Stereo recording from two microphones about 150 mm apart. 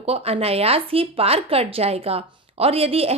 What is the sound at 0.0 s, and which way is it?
Speech, 40° right (ahead or behind).